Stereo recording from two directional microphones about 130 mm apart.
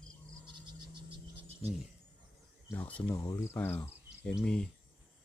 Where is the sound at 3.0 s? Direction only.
20° left (ahead or behind).